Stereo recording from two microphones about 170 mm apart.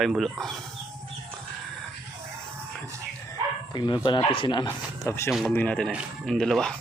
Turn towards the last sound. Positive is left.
turn(degrees=5)  # may be behind; listen again after turning